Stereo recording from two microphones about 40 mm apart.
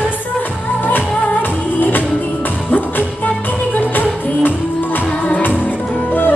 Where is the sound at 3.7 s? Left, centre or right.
Left.